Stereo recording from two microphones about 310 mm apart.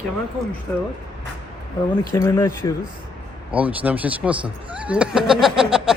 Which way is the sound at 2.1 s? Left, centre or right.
Centre.